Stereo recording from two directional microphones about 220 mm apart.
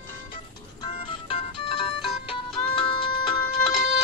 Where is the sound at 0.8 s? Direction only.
25° left (ahead or behind).